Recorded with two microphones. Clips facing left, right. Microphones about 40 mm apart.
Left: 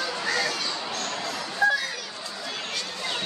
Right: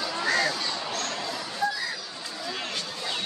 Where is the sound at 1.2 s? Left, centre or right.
Left.